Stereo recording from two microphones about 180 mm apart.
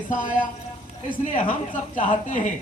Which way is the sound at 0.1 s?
45° left (ahead or behind).